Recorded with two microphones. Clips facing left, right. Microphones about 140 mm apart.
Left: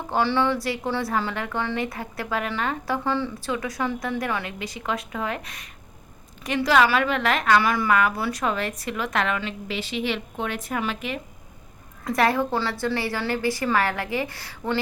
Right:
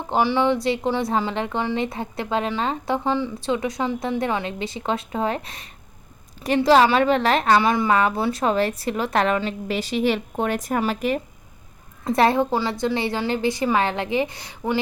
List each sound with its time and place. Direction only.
0.1 s a woman's voice: 15° right (ahead or behind); by 11.2 s 40° right (ahead or behind)
12.0 s a woman's voice: 25° right (ahead or behind)